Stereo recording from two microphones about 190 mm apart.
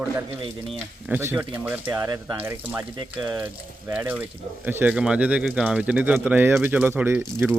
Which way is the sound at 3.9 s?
10° right (ahead or behind).